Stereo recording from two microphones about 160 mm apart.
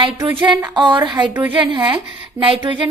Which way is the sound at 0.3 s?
30° right (ahead or behind).